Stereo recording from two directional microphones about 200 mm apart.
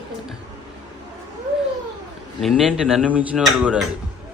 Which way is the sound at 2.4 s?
Centre (ahead or behind).